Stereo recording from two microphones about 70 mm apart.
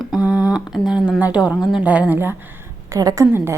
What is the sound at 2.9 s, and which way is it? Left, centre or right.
Speech, right.